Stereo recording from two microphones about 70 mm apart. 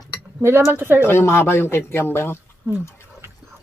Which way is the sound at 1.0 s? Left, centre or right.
Left.